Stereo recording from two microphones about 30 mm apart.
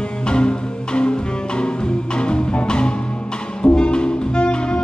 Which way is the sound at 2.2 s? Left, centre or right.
Left.